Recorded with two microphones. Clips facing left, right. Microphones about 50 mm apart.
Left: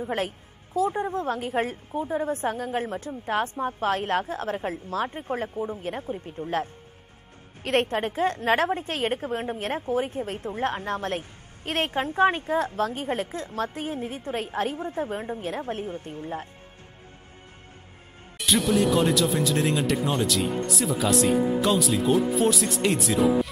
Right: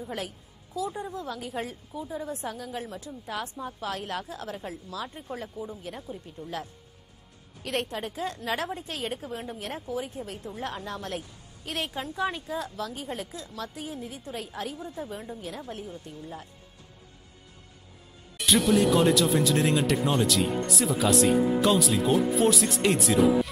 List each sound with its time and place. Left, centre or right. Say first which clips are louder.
0.0 s a woman's voice: left 7 dB; left
18.4 s speech: even; centre